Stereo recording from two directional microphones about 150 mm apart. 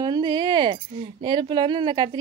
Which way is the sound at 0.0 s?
25° right (ahead or behind).